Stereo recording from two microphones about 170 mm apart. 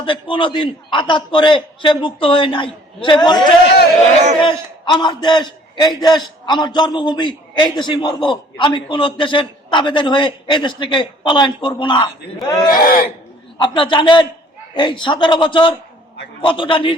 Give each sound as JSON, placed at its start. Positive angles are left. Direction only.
{"t": 0.0, "sound": "a man's voice", "side_deg": 30}
{"t": 12.8, "sound": "speech", "side_deg": 60}
{"t": 13.6, "sound": "a man's voice", "side_deg": 30}